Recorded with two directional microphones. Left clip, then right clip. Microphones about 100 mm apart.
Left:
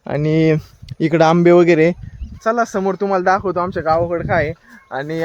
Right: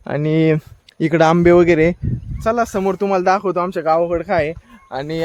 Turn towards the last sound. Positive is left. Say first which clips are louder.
# left 1 dB
turn(degrees=10)  # may be behind; listen again after turning